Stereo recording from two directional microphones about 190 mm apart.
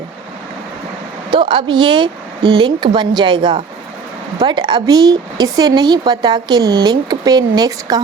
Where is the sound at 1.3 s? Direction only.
25° right (ahead or behind).